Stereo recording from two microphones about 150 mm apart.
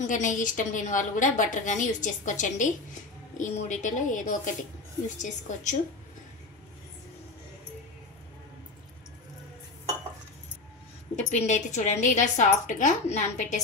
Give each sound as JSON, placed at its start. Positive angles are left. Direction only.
{"t": 0.0, "sound": "a woman's voice", "side_deg": 55}
{"t": 11.1, "sound": "a woman's voice", "side_deg": 50}